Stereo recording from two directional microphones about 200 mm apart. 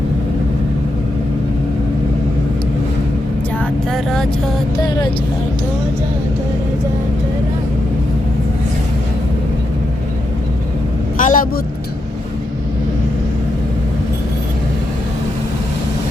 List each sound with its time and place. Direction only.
3.6 s vehicle: 5° left (ahead or behind)
11.2 s vehicle: 40° left (ahead or behind)